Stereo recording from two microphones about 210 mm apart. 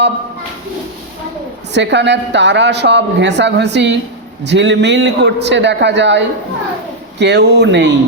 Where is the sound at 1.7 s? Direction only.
55° right (ahead or behind).